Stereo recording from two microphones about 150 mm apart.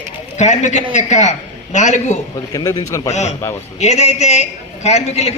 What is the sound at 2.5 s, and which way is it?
Speech, 25° left (ahead or behind).